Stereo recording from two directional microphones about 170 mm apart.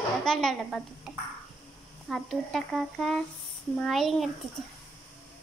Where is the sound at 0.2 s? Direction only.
Centre (ahead or behind).